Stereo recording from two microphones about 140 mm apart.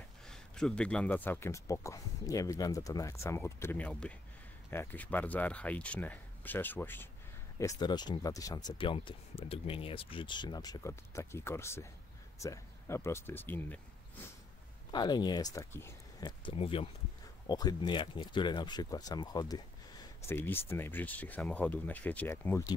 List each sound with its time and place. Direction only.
0.3 s speech: 5° left (ahead or behind)
7.5 s speech: 25° left (ahead or behind)
14.9 s speech: 30° left (ahead or behind)
16.5 s speech: 40° left (ahead or behind)
17.5 s speech: 30° left (ahead or behind)
20.2 s speech: 15° left (ahead or behind)